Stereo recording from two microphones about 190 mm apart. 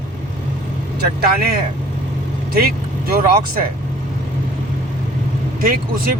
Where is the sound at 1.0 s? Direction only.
55° right (ahead or behind).